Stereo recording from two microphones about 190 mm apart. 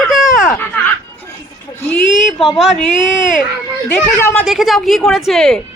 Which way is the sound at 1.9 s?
Centre (ahead or behind).